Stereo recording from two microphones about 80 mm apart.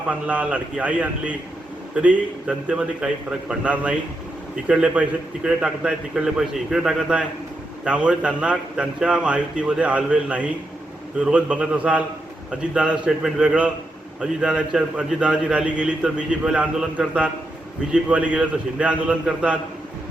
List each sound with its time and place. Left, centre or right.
0.1 s a man's voice: centre